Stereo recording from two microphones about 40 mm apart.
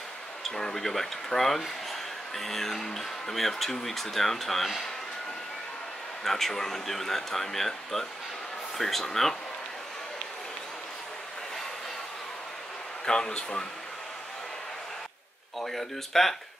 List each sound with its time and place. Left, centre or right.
0.7 s speech: centre
6.2 s speech: centre
13.0 s speech: centre
15.6 s speech: centre